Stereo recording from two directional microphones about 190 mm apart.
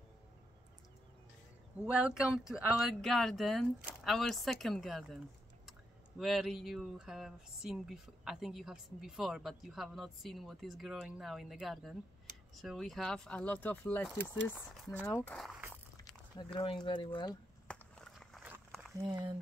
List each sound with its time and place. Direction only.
1.9 s speech: 5° right (ahead or behind)
16.5 s speech: 25° left (ahead or behind)
17.6 s walk: 5° left (ahead or behind)